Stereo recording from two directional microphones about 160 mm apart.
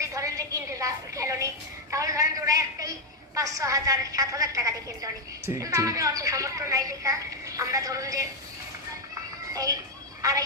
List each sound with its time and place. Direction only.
0.0 s a sound: 20° right (ahead or behind)
1.9 s a man's voice: 20° right (ahead or behind)
9.5 s a child's voice: 20° right (ahead or behind)